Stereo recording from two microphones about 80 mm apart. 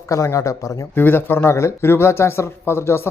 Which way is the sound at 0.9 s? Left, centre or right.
Left.